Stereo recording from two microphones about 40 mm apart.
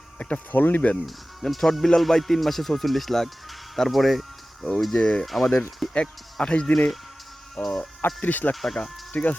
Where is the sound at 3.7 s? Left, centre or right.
Centre.